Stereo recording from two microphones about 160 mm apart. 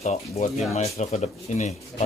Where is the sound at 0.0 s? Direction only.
45° left (ahead or behind).